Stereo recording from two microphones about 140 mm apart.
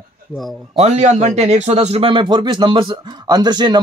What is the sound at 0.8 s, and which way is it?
Speech, 55° right (ahead or behind).